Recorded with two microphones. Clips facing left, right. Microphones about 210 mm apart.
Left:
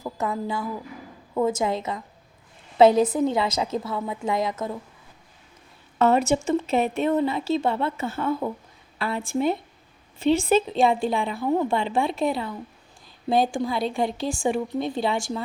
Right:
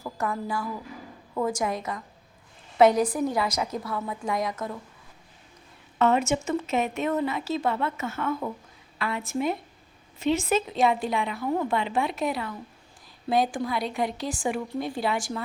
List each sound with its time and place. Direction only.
0.0 s a woman's voice: 20° left (ahead or behind)
6.0 s speech: 35° left (ahead or behind)